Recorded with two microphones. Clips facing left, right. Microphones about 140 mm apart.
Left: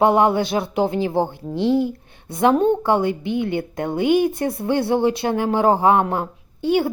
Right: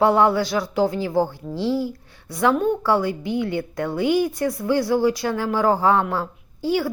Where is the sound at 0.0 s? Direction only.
20° left (ahead or behind).